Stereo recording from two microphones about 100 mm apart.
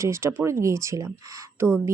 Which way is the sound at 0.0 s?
30° right (ahead or behind).